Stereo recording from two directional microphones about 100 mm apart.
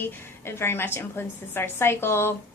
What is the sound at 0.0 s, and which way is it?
A woman's voice, 25° left (ahead or behind).